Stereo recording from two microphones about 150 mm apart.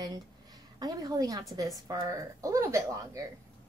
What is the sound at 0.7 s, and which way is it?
A woman's voice, 25° right (ahead or behind).